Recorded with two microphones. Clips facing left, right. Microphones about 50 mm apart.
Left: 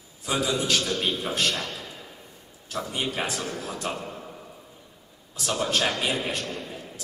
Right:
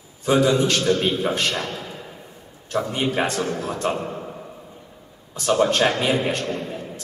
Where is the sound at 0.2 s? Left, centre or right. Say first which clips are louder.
Right 9 dB; centre.